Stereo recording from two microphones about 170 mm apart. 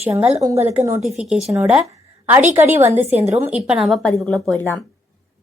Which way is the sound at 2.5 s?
10° right (ahead or behind).